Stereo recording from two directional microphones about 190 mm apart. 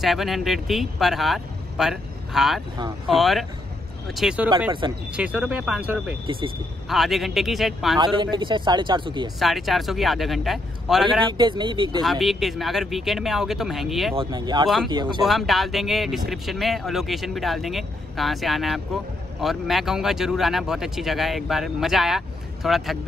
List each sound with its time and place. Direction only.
0.0 s speech: centre (ahead or behind)
8.0 s a man's voice: 25° right (ahead or behind)
9.4 s speech: centre (ahead or behind)
11.3 s a man's voice: 25° right (ahead or behind)
12.0 s speech: centre (ahead or behind)
14.1 s a man's voice: 25° right (ahead or behind)
15.2 s speech: centre (ahead or behind)